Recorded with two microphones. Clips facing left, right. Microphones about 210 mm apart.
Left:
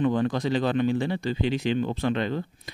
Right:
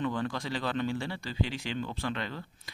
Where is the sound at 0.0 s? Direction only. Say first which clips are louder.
Left 8 dB; 20° left (ahead or behind).